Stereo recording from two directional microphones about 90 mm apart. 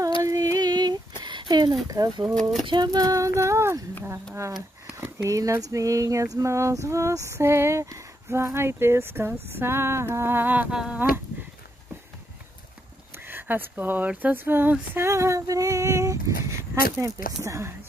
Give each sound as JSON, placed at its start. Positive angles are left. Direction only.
{"t": 0.2, "sound": "music", "side_deg": -40}
{"t": 1.2, "sound": "a sound", "side_deg": -60}
{"t": 2.6, "sound": "speech", "side_deg": -55}
{"t": 10.7, "sound": "speech", "side_deg": -10}
{"t": 13.1, "sound": "speech", "side_deg": -25}